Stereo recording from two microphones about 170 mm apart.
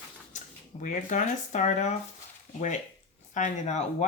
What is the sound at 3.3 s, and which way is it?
Speech, 45° left (ahead or behind).